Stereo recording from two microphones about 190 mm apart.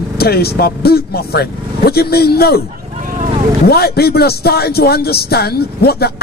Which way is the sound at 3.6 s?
55° left (ahead or behind).